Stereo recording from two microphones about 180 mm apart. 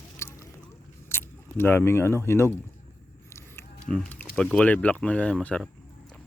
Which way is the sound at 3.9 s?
10° left (ahead or behind).